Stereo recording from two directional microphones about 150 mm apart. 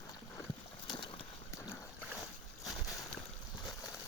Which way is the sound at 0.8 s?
30° left (ahead or behind).